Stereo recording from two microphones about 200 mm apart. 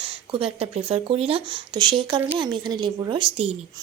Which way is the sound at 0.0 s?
25° right (ahead or behind).